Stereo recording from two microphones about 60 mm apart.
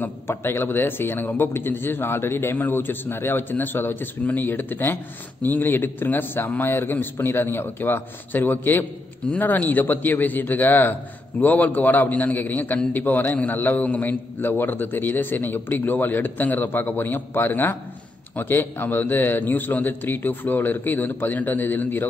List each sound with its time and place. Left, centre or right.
0.3 s a man's voice: left